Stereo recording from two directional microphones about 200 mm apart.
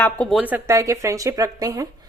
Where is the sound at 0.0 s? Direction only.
5° left (ahead or behind).